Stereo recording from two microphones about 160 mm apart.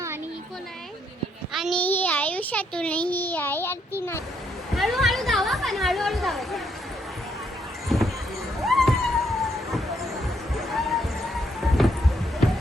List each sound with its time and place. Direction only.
1.5 s a child's voice: centre (ahead or behind)
1.8 s a child's voice: 10° left (ahead or behind)
4.7 s a woman's voice: centre (ahead or behind)
7.9 s horse: centre (ahead or behind)
8.6 s cat: centre (ahead or behind)
10.6 s music: centre (ahead or behind)